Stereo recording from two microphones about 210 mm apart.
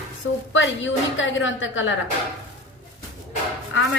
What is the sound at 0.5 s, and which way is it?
A woman's voice, 65° left (ahead or behind).